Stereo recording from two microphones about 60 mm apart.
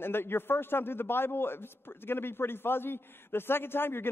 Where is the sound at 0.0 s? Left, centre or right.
Left.